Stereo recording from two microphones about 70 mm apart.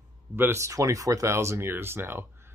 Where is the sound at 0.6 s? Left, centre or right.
Right.